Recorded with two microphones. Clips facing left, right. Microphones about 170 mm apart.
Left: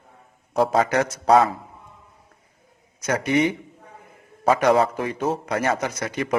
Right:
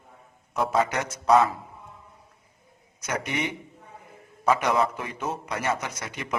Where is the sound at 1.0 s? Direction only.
90° left.